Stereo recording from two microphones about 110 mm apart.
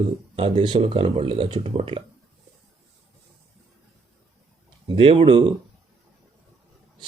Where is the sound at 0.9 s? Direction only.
55° right (ahead or behind).